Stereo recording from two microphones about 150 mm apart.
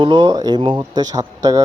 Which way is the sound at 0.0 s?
30° right (ahead or behind).